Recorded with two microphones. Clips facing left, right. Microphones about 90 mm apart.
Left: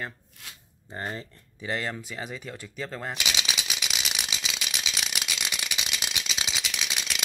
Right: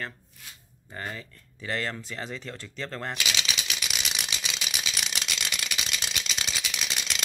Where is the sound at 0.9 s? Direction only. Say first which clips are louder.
Left 2 dB; 35° left (ahead or behind).